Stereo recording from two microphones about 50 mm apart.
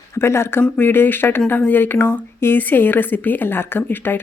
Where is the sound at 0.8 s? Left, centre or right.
Left.